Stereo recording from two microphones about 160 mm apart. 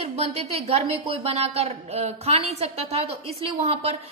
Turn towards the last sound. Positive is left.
turn(degrees=-40)  # may be behind; listen again after turning